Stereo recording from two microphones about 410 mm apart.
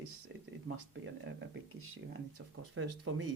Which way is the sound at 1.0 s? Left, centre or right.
Right.